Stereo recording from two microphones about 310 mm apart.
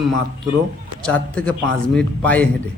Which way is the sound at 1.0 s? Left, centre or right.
Centre.